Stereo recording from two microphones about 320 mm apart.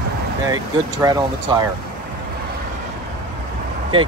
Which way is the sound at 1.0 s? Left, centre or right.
Centre.